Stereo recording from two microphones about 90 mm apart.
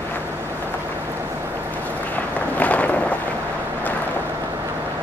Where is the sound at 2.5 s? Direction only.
15° left (ahead or behind).